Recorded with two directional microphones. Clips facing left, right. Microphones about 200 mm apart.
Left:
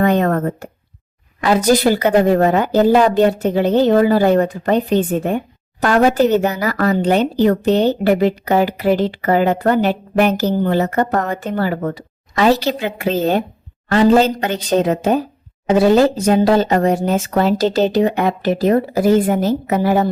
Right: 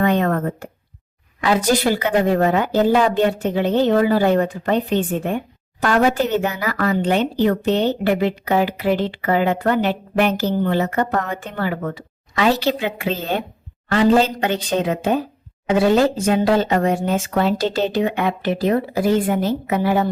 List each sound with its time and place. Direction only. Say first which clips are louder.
0.0 s speech: left 3 dB; 40° left (ahead or behind)